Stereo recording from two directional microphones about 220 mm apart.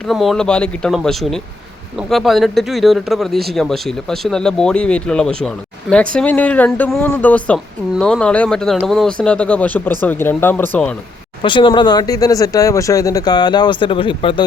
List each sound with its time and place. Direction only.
0.1 s speech: centre (ahead or behind)
11.4 s speech: 20° left (ahead or behind)